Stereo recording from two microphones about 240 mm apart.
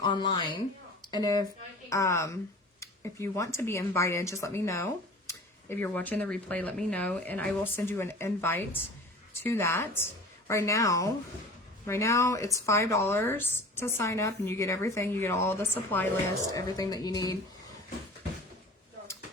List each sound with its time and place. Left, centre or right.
0.0 s speech: centre